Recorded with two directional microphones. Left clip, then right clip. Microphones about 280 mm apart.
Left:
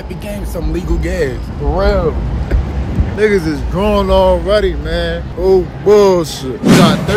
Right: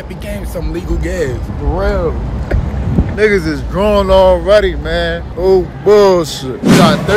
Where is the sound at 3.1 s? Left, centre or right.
Centre.